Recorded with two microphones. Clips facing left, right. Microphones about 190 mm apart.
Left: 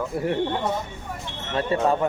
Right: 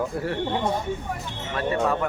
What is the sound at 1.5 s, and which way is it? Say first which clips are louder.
Speech: left 2 dB; 25° left (ahead or behind).